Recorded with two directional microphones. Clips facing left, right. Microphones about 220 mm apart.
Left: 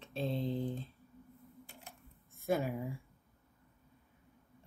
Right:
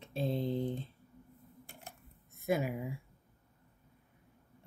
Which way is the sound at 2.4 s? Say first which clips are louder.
Right 1 dB; 15° right (ahead or behind).